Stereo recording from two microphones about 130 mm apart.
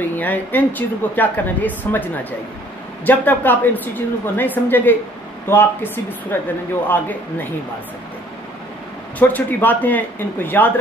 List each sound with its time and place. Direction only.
0.2 s a woman's voice: 15° left (ahead or behind)
9.2 s a woman's voice: 15° left (ahead or behind)